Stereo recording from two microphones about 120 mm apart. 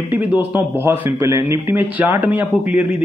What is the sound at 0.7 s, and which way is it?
A man's voice, 20° right (ahead or behind).